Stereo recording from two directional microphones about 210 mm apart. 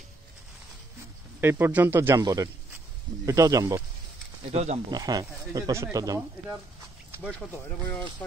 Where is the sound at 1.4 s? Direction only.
10° right (ahead or behind).